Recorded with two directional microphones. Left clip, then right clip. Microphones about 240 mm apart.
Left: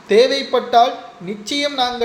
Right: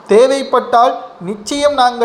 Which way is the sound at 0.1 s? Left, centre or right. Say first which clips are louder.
Right 4 dB; centre.